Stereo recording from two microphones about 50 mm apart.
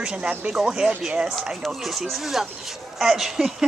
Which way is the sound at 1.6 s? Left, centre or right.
Centre.